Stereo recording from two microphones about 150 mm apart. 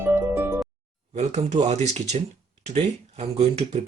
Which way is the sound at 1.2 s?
50° right (ahead or behind).